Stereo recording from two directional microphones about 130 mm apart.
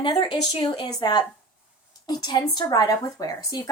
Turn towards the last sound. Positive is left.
turn(degrees=30)  # may be behind; listen again after turning